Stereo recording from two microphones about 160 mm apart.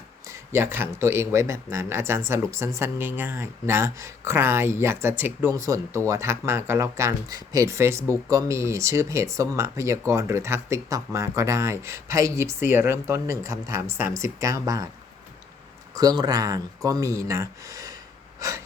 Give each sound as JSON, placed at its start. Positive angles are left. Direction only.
{"t": 0.3, "sound": "speech", "side_deg": -15}
{"t": 16.0, "sound": "speech", "side_deg": -25}
{"t": 18.3, "sound": "a sound", "side_deg": -20}